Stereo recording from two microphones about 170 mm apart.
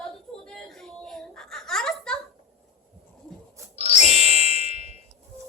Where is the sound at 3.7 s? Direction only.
35° left (ahead or behind).